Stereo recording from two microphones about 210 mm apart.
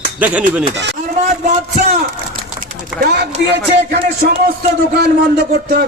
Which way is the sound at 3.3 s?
55° right (ahead or behind).